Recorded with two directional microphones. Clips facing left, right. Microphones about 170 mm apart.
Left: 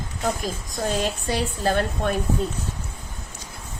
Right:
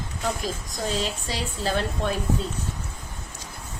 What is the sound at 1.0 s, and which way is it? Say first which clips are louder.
Speech: left 5 dB; 55° left (ahead or behind).